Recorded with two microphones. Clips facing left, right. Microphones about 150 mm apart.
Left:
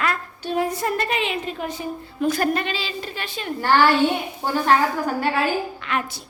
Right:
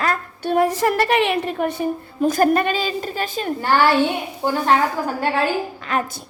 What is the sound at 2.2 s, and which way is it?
A woman's voice, 45° right (ahead or behind).